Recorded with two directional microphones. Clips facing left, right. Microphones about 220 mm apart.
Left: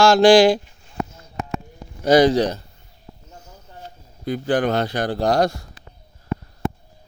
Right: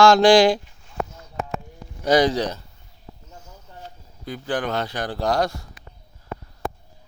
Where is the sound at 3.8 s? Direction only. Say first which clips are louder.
Left 8 dB; 55° left (ahead or behind).